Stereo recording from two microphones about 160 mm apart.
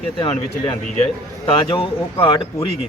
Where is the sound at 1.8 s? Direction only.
35° left (ahead or behind).